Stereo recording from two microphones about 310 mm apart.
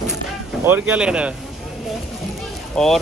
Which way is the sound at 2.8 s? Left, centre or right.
Centre.